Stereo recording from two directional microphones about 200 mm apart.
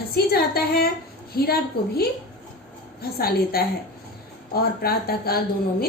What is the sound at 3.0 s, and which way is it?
A woman's voice, 50° left (ahead or behind).